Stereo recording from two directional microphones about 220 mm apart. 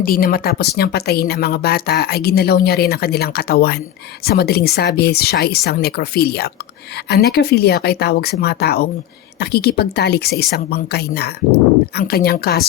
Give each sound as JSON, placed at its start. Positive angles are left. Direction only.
{"t": 0.0, "sound": "speech", "side_deg": 40}